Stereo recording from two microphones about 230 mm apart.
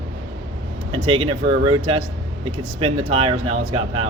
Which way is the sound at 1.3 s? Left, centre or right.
Right.